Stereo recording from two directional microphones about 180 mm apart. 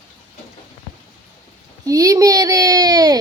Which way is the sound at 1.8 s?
20° right (ahead or behind).